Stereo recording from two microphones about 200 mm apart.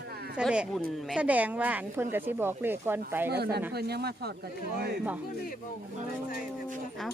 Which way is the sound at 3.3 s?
55° right (ahead or behind).